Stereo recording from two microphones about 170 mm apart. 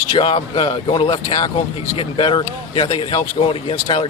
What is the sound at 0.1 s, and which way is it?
Speech, 30° left (ahead or behind).